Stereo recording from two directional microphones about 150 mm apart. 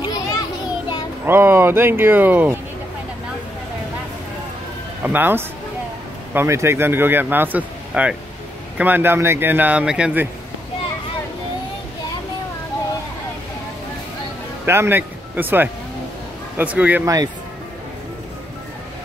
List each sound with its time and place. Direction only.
0.0 s children playing: 30° left (ahead or behind)
1.2 s speech: 15° right (ahead or behind)
5.0 s speech: 15° right (ahead or behind)
14.7 s speech: 15° right (ahead or behind)